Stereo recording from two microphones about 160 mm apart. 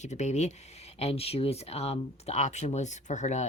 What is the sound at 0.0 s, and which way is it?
Speech, 45° left (ahead or behind).